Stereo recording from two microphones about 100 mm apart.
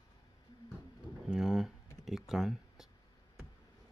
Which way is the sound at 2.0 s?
5° right (ahead or behind).